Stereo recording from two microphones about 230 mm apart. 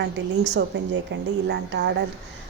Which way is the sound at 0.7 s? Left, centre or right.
Right.